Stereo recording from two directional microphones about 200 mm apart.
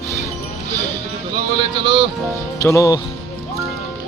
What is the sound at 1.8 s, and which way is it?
Speech, 25° right (ahead or behind).